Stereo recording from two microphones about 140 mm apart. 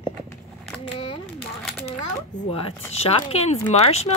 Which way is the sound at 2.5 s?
45° left (ahead or behind).